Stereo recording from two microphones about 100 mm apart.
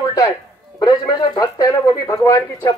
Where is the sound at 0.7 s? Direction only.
45° left (ahead or behind).